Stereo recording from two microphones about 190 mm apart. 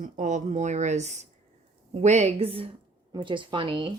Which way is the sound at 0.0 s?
40° right (ahead or behind).